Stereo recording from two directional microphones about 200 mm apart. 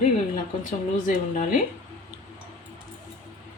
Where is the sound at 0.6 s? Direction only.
40° left (ahead or behind).